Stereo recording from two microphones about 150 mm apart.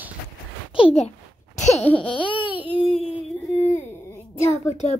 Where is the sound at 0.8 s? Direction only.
40° left (ahead or behind).